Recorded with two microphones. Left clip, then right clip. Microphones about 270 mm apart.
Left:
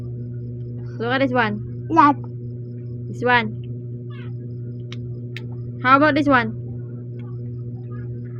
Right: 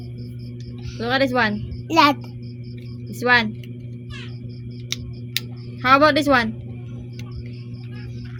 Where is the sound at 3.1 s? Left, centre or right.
Right.